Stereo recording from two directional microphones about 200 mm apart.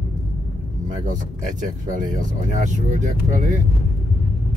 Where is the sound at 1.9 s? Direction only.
40° right (ahead or behind).